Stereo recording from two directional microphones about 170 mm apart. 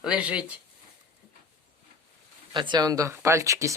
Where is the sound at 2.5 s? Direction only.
25° right (ahead or behind).